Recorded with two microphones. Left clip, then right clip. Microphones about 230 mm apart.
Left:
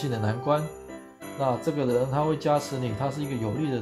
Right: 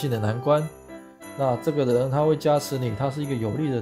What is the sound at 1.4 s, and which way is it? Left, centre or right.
Speech, right.